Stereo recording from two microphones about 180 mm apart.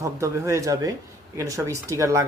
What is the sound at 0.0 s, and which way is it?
Speech, 15° right (ahead or behind).